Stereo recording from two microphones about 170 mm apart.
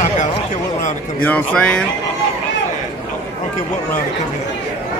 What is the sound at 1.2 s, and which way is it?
Speech, 5° left (ahead or behind).